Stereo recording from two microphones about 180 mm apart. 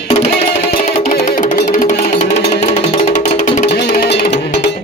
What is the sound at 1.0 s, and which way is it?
Music, 45° left (ahead or behind).